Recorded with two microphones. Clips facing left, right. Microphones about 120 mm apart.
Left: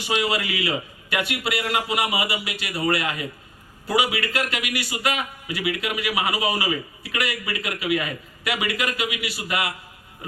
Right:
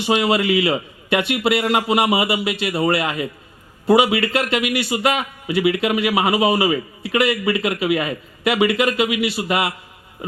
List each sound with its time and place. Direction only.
0.0 s a man's voice: 25° right (ahead or behind)